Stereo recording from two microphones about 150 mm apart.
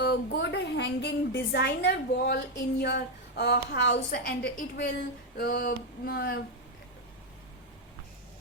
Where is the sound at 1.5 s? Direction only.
90° left.